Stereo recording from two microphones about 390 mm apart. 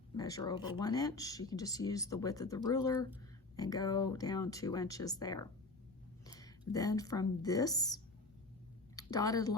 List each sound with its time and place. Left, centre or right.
0.2 s speech: centre